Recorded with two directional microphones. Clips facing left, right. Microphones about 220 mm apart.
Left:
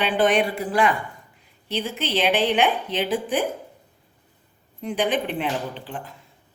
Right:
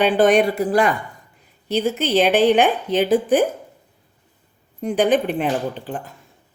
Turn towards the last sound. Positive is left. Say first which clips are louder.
# right 5 dB
turn(degrees=-45)  # may be behind; listen again after turning